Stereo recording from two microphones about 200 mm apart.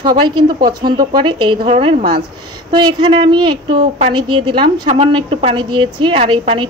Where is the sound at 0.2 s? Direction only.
25° right (ahead or behind).